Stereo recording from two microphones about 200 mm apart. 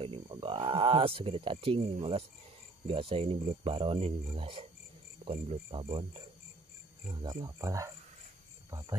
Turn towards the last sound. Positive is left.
turn(degrees=-15)  # may be behind; listen again after turning